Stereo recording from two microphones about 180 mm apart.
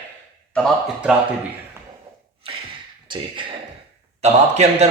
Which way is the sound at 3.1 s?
30° right (ahead or behind).